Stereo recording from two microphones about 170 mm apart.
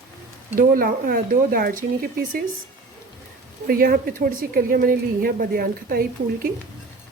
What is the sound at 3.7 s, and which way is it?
Speech, 60° right (ahead or behind).